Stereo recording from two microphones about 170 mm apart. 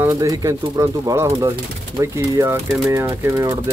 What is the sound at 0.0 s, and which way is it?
Speech, 20° right (ahead or behind).